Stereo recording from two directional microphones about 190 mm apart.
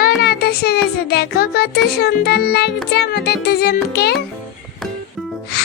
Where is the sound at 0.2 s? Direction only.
55° left (ahead or behind).